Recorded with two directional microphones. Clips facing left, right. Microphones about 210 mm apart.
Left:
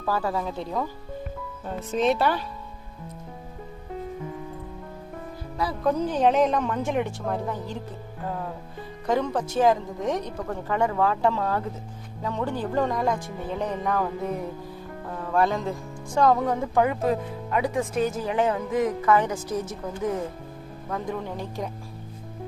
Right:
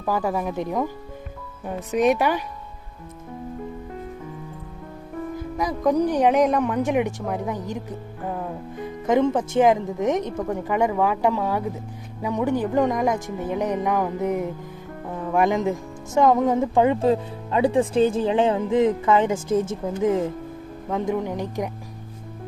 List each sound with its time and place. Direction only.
0.0 s speech: 15° right (ahead or behind)
5.5 s speech: 15° right (ahead or behind)
9.0 s speech: 20° right (ahead or behind)